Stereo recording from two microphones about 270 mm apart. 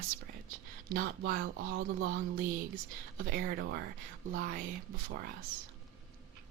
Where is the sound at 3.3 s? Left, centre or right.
Right.